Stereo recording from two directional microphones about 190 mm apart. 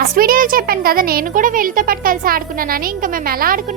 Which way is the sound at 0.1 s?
50° right (ahead or behind).